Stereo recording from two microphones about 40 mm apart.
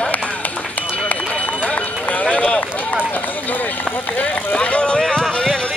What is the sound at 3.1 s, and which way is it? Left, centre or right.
Run, left.